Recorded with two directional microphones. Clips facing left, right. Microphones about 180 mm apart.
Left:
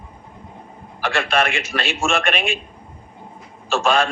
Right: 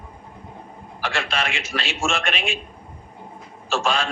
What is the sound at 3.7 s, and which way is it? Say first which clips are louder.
Speech: left 5 dB; 55° left (ahead or behind).